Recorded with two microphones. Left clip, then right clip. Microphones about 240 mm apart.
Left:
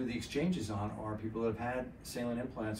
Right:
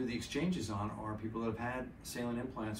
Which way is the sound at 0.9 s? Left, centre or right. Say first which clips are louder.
Left 1 dB; centre.